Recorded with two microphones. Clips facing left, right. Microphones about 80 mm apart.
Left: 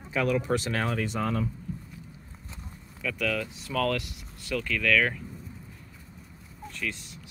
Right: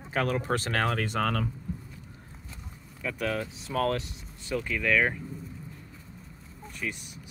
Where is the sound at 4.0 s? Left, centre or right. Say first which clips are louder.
Even; left.